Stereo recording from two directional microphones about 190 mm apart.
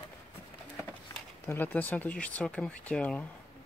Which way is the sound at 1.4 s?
10° left (ahead or behind).